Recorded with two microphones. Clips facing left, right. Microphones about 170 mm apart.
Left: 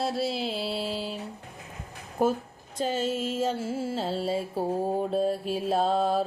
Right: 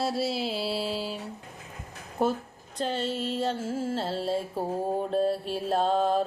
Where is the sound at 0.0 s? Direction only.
Centre (ahead or behind).